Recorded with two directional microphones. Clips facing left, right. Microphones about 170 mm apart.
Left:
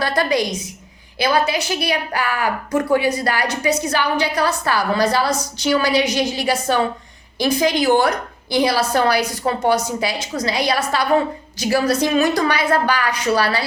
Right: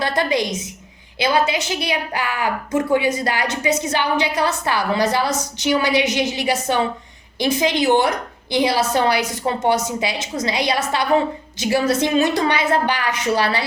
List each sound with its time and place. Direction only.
0.0 s a woman's voice: 20° right (ahead or behind)